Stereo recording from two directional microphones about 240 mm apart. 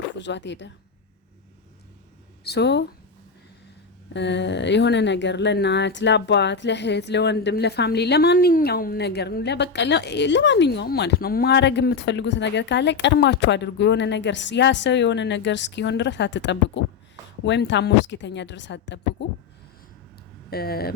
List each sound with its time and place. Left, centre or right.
0.2 s speech: left
2.4 s speech: left
4.1 s speech: left
20.5 s speech: left